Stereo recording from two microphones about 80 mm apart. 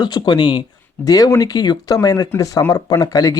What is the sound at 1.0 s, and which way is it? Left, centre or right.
A man's voice, left.